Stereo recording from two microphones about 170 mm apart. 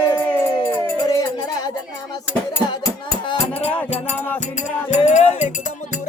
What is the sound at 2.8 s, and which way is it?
Music, 30° left (ahead or behind).